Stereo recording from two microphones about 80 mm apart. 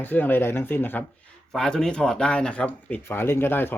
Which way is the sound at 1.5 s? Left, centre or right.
Centre.